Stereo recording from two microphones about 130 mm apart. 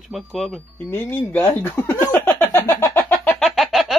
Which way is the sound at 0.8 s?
15° left (ahead or behind).